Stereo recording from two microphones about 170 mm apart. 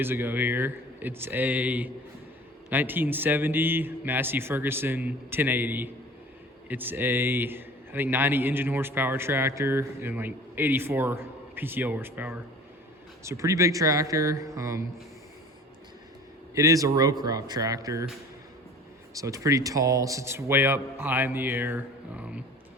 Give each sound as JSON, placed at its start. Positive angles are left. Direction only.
{"t": 0.0, "sound": "a man's voice", "side_deg": -10}
{"t": 16.6, "sound": "speech", "side_deg": -20}
{"t": 19.1, "sound": "a man's voice", "side_deg": -20}